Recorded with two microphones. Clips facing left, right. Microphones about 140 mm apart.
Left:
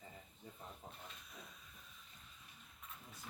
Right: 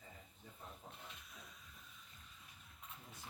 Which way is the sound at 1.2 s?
Centre (ahead or behind).